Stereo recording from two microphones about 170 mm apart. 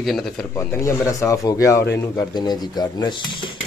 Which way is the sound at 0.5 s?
15° left (ahead or behind).